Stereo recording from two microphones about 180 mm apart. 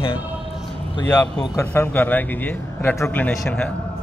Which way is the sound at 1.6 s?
10° left (ahead or behind).